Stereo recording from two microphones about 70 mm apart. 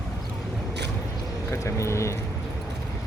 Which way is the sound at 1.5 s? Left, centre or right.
Left.